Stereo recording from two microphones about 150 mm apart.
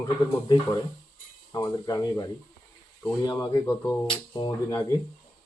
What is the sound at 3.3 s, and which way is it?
Speech, 25° left (ahead or behind).